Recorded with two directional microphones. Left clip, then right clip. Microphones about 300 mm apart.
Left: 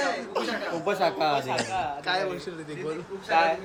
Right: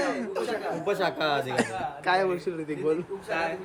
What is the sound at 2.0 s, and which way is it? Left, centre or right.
Speech, centre.